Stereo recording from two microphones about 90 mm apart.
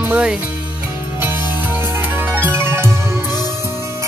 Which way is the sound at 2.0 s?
25° right (ahead or behind).